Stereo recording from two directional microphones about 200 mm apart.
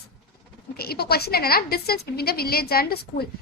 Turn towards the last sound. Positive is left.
turn(degrees=50)  # may be behind; listen again after turning